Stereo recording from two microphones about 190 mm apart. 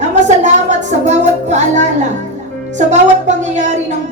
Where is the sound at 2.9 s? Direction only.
40° right (ahead or behind).